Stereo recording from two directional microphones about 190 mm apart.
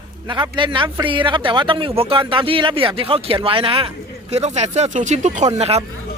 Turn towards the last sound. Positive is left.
turn(degrees=-35)  # may be behind; listen again after turning